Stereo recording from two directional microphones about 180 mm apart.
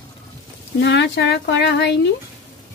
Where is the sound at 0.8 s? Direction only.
80° left.